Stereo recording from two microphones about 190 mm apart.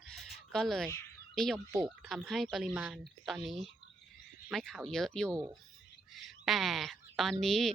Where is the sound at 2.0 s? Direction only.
Centre (ahead or behind).